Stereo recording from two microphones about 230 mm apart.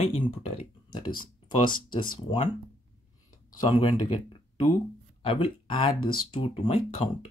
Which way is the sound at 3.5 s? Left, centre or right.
Centre.